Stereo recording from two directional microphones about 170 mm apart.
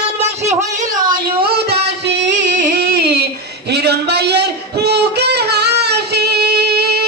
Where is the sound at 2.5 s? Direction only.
50° right (ahead or behind).